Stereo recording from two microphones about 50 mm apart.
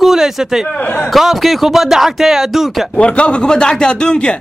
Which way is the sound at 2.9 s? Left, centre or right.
Left.